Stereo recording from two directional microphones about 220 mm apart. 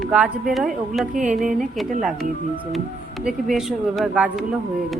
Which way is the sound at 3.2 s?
Centre (ahead or behind).